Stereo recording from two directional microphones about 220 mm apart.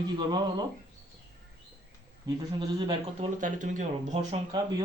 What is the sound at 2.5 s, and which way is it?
Speech, 20° right (ahead or behind).